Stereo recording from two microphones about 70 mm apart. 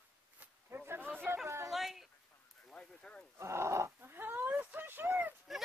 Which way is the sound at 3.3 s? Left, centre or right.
Right.